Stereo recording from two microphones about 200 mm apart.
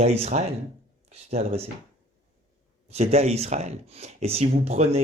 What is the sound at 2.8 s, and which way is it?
A man's voice, 30° right (ahead or behind).